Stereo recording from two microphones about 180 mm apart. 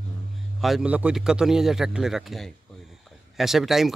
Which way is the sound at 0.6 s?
Centre (ahead or behind).